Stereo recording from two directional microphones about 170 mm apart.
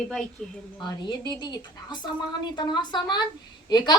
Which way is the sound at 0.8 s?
25° left (ahead or behind).